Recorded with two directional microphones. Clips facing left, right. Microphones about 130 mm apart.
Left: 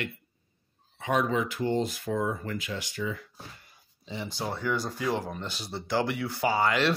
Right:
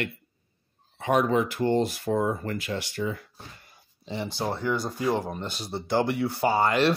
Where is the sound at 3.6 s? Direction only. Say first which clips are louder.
Right 5 dB; 60° right (ahead or behind).